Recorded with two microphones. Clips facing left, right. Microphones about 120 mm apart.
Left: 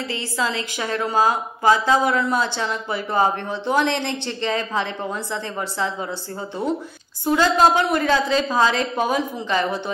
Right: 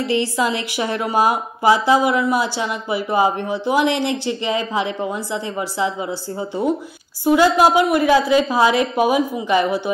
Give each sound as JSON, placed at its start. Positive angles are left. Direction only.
{"t": 0.0, "sound": "a woman's voice", "side_deg": -15}